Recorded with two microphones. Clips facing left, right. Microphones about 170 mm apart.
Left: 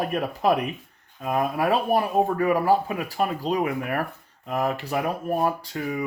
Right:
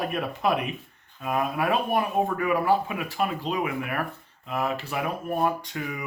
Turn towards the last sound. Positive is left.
turn(degrees=35)  # may be behind; listen again after turning